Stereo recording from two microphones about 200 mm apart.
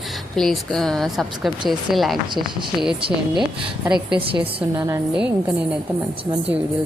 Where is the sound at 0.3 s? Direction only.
Centre (ahead or behind).